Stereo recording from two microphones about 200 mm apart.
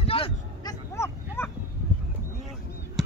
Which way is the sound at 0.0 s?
25° left (ahead or behind).